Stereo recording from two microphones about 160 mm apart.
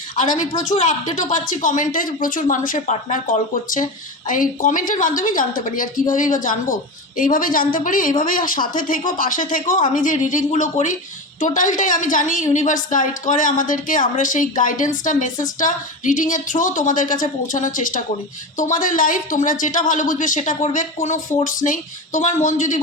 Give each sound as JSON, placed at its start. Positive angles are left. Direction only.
{"t": 0.2, "sound": "a woman's voice", "side_deg": 50}